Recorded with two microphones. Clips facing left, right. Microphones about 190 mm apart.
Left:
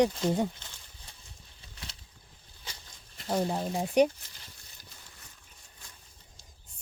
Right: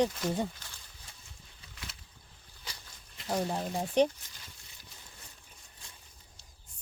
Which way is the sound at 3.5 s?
10° left (ahead or behind).